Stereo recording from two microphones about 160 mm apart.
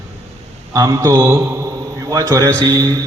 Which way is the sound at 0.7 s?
20° right (ahead or behind).